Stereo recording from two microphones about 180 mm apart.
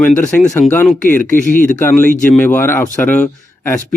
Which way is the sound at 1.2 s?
45° left (ahead or behind).